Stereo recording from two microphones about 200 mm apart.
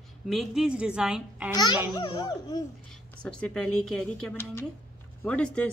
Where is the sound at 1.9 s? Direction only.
20° left (ahead or behind).